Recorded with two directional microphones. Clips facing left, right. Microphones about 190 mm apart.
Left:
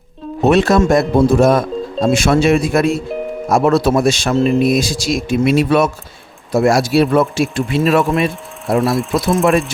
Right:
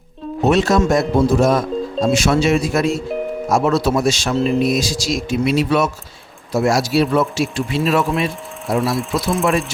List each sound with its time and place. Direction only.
0.4 s speech: 60° left (ahead or behind)
8.6 s speech: centre (ahead or behind)
9.1 s speech: 55° left (ahead or behind)